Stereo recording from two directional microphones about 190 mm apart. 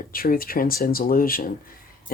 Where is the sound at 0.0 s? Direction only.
50° left (ahead or behind).